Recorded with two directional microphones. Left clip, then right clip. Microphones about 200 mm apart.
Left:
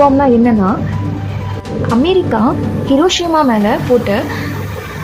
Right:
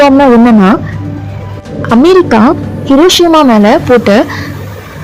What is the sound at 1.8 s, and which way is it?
A woman's voice, 45° right (ahead or behind).